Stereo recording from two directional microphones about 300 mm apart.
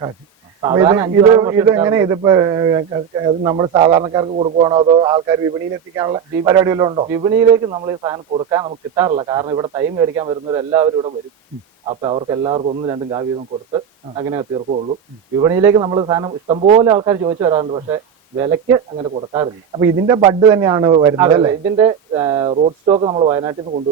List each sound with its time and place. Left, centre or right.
0.6 s a man's voice: centre